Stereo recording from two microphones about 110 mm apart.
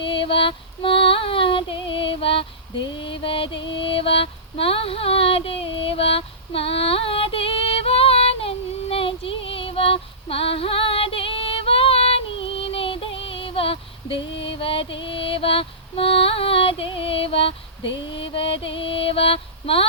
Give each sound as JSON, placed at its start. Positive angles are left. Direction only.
{"t": 0.0, "sound": "female singing", "side_deg": 50}